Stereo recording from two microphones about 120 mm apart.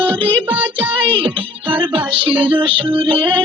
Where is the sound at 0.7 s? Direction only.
45° right (ahead or behind).